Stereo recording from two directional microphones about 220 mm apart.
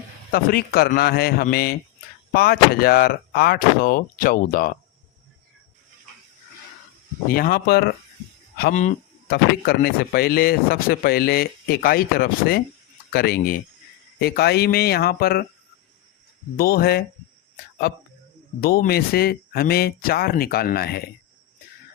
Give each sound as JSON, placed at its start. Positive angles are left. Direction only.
{"t": 0.3, "sound": "speech", "side_deg": 40}
{"t": 7.3, "sound": "speech", "side_deg": 40}
{"t": 16.6, "sound": "speech", "side_deg": 45}